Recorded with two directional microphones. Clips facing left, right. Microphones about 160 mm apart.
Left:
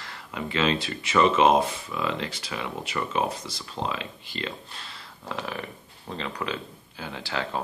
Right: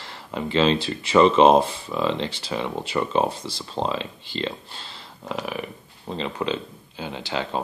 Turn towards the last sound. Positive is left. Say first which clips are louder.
# right 3 dB
turn(degrees=-20)  # may be behind; listen again after turning